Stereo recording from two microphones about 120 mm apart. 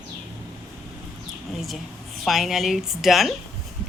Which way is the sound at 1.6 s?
Centre (ahead or behind).